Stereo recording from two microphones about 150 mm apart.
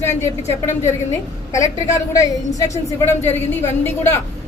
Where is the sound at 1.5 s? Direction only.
20° left (ahead or behind).